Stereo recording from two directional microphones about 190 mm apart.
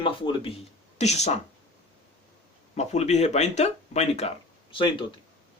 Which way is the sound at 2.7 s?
35° left (ahead or behind).